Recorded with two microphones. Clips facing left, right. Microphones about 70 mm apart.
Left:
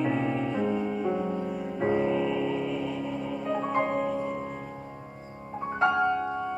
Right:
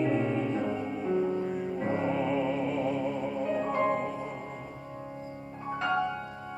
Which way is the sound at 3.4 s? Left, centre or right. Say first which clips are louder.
Left 1 dB; left.